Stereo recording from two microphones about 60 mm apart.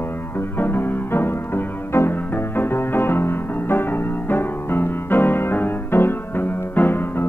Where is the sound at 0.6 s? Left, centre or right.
Left.